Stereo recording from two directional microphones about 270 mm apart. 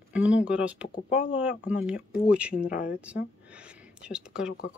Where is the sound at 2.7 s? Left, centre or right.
Left.